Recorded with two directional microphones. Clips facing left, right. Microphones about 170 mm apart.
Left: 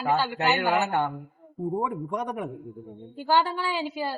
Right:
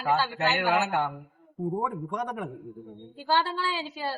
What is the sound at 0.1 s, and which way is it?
A woman's voice, 15° left (ahead or behind).